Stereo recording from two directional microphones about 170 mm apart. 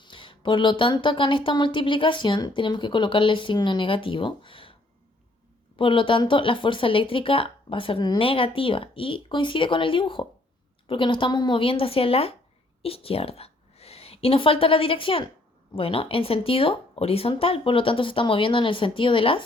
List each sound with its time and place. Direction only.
0.0 s speech: 30° left (ahead or behind)